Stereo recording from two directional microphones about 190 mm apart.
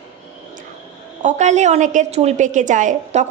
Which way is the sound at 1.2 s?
40° right (ahead or behind).